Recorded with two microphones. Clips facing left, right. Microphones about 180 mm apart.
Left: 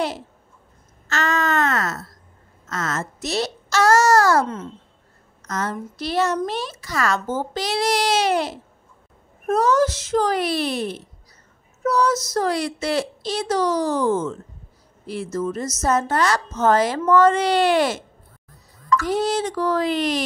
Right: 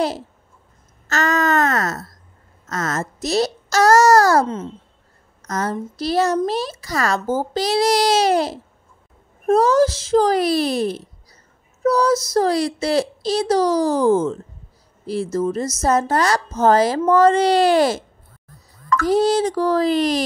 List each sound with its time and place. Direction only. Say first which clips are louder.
1.0 s a sound: right 3 dB; 40° right (ahead or behind)
2.7 s a child's voice: right 3 dB; 40° right (ahead or behind)
15.3 s speech: right 2 dB; 30° right (ahead or behind)
19.0 s speech: right 9 dB; 35° right (ahead or behind)